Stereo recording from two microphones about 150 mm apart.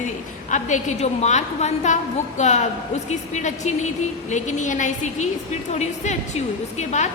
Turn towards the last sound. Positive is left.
turn(degrees=50)  # may be behind; listen again after turning